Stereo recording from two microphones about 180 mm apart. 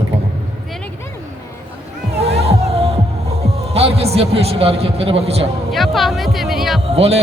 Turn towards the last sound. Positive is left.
turn(degrees=-35)  # may be behind; listen again after turning